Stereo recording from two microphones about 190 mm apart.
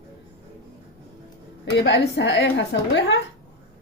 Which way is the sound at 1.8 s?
65° left (ahead or behind).